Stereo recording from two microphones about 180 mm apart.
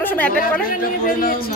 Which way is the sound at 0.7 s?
50° left (ahead or behind).